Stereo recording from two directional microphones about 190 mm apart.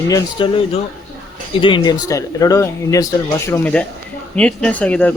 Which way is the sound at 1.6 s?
25° left (ahead or behind).